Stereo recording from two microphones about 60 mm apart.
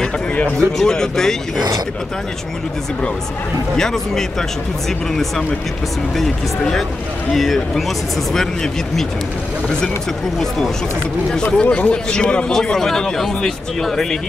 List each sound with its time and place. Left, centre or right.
0.6 s speech: centre
3.7 s speech: centre
7.3 s speech: centre
11.4 s speech: centre